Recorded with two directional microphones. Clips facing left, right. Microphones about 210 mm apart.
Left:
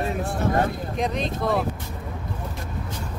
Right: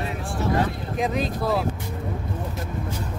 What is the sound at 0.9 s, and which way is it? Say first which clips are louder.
Speech: right 4 dB; 5° right (ahead or behind).